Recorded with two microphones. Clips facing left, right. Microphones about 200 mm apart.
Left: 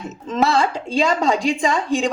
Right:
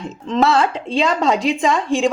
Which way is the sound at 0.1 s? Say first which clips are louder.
Right 2 dB; centre (ahead or behind).